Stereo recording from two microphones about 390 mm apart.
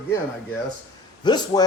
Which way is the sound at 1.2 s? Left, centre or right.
Centre.